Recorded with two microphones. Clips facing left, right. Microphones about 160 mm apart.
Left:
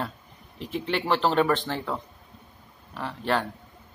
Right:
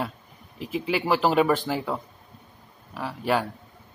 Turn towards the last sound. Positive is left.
turn(degrees=-5)  # may be behind; listen again after turning